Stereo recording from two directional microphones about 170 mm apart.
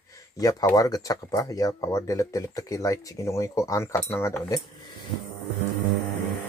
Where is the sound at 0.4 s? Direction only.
20° left (ahead or behind).